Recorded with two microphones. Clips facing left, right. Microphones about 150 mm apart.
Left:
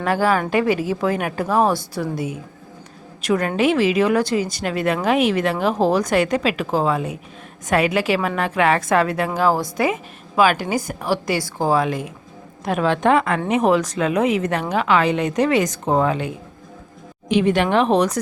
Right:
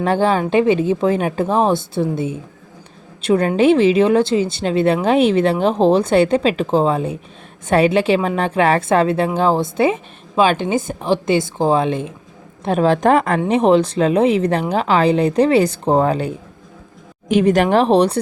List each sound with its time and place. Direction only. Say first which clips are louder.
0.0 s a woman's voice: right 3 dB; 25° right (ahead or behind)
13.5 s a woman's voice: right 4 dB; 30° right (ahead or behind)